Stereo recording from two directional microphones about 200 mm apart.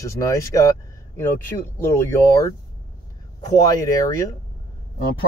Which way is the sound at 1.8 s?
15° left (ahead or behind).